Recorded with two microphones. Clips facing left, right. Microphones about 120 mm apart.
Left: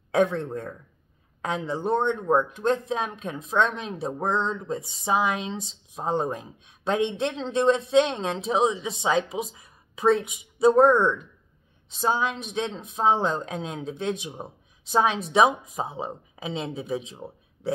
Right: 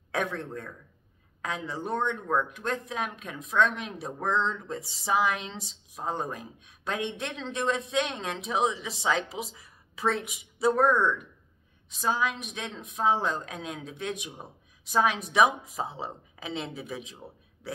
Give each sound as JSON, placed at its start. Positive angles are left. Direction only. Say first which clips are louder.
{"t": 0.1, "sound": "speech", "louder": "left 8 dB", "side_deg": 25}